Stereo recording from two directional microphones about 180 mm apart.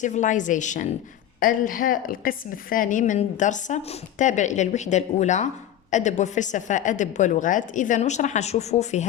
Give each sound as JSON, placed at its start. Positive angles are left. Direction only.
{"t": 0.0, "sound": "a woman's voice", "side_deg": 40}